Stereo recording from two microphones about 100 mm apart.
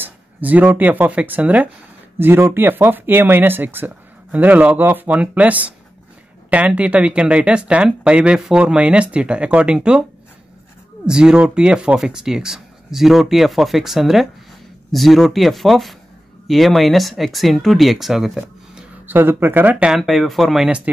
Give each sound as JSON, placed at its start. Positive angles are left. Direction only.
{"t": 0.0, "sound": "speech", "side_deg": -15}
{"t": 11.1, "sound": "speech", "side_deg": -10}
{"t": 19.0, "sound": "speech", "side_deg": -20}
{"t": 19.9, "sound": "speech", "side_deg": 0}